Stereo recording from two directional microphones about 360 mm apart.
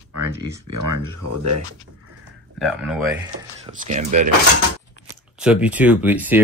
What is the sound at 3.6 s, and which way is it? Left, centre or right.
Speech, centre.